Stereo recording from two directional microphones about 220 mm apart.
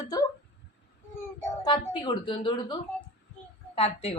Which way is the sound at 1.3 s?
20° left (ahead or behind).